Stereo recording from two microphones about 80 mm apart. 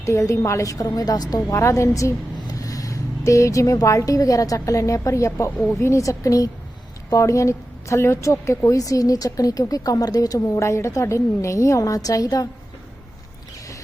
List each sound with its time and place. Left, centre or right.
0.0 s a woman's voice: left
0.9 s a woman's voice: left
1.4 s a woman's voice: left